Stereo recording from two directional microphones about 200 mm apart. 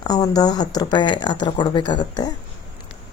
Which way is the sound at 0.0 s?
20° left (ahead or behind).